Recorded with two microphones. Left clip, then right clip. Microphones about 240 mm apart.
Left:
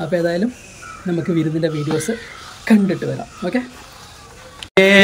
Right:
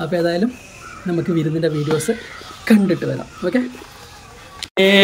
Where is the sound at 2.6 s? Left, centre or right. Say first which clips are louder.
Right 1 dB; centre.